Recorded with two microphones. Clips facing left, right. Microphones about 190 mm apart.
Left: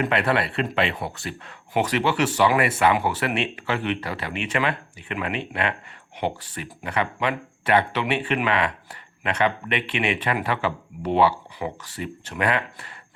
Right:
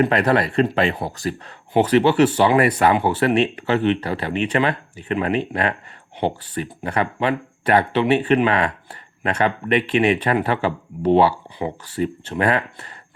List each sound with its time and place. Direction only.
0.0 s speech: 40° right (ahead or behind)